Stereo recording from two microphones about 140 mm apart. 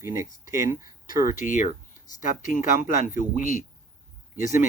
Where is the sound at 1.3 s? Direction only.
70° left (ahead or behind).